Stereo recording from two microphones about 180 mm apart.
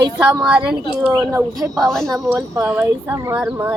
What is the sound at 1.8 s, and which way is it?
Speech, 5° left (ahead or behind).